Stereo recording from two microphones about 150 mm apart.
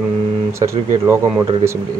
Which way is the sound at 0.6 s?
35° right (ahead or behind).